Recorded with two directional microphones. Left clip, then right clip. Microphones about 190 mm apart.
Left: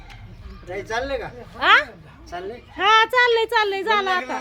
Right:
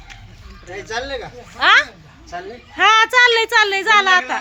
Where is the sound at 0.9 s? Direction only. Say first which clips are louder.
Right 1 dB; 30° left (ahead or behind).